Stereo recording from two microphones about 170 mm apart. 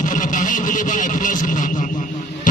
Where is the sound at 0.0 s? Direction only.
50° left (ahead or behind).